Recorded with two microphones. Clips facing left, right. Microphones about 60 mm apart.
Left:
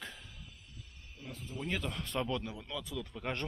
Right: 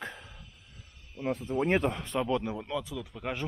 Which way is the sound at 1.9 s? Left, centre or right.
Centre.